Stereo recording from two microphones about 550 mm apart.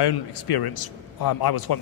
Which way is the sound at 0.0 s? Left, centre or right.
Left.